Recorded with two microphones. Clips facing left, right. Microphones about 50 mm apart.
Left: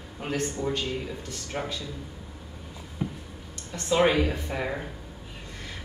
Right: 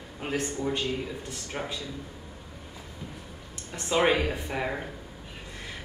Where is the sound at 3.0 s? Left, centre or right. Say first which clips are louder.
Left 11 dB; left.